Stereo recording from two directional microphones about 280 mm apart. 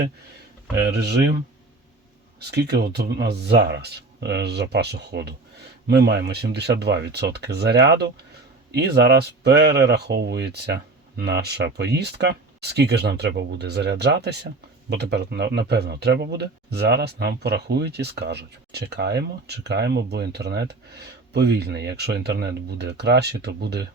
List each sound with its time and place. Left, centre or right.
0.8 s speech: right
2.4 s speech: right